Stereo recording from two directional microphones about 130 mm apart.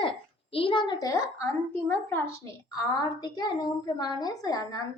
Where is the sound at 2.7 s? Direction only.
30° left (ahead or behind).